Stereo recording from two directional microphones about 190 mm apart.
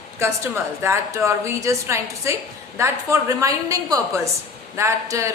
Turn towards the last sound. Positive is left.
turn(degrees=-15)  # may be behind; listen again after turning